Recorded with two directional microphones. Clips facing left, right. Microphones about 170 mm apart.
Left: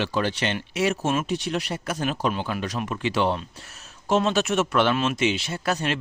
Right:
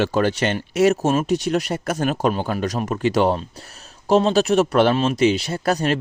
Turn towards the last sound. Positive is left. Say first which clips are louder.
# right 6 dB
turn(degrees=-40)  # may be behind; listen again after turning